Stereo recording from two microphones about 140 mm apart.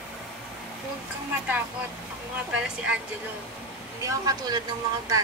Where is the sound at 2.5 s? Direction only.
5° right (ahead or behind).